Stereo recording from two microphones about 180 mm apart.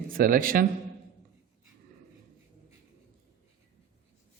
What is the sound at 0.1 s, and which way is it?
Speech, 50° right (ahead or behind).